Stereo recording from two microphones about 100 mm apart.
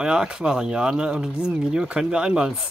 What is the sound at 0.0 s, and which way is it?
Speech, 5° right (ahead or behind).